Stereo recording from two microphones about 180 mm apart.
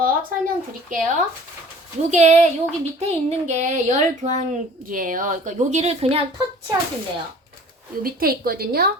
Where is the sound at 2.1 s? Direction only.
40° right (ahead or behind).